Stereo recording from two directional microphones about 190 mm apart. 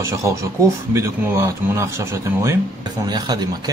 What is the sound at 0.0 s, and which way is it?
Speech, 15° right (ahead or behind).